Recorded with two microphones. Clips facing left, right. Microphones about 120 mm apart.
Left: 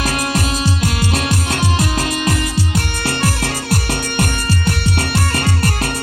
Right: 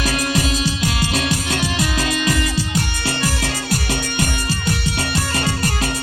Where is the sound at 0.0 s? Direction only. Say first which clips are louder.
Left 1 dB; 50° left (ahead or behind).